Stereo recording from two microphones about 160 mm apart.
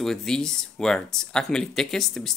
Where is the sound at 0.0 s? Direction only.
Centre (ahead or behind).